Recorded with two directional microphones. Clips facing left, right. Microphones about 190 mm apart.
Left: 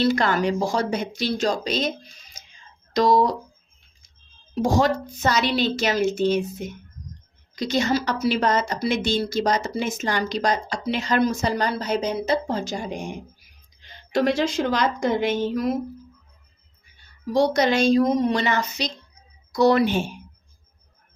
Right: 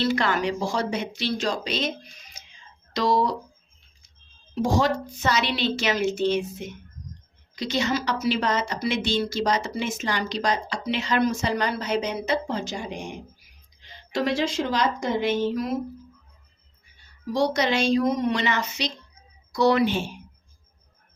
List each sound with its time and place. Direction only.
0.0 s a woman's voice: 45° left (ahead or behind)
2.9 s speech: 45° left (ahead or behind)
4.5 s a woman's voice: 45° left (ahead or behind)
17.3 s a woman's voice: 45° left (ahead or behind)